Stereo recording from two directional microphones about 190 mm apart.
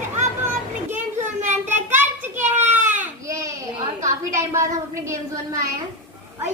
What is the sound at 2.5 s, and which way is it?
Baby cry, 10° right (ahead or behind).